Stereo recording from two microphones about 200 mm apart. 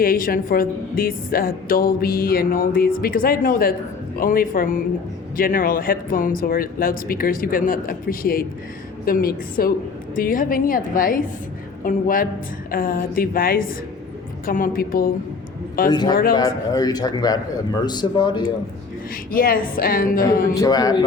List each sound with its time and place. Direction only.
0.0 s a woman's voice: 45° left (ahead or behind)
15.9 s a man's voice: 20° left (ahead or behind)
19.3 s a woman's voice: 45° left (ahead or behind)
20.5 s a man's voice: 20° left (ahead or behind)